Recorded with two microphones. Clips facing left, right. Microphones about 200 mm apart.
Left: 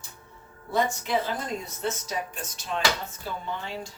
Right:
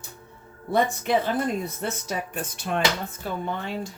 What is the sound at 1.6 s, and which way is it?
Speech, 55° right (ahead or behind).